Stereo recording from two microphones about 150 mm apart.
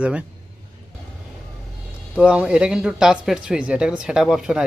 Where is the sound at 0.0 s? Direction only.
10° right (ahead or behind).